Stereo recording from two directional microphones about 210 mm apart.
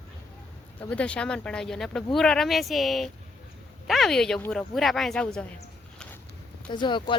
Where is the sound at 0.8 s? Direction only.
5° left (ahead or behind).